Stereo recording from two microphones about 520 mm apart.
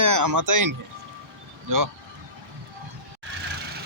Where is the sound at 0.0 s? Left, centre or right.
Right.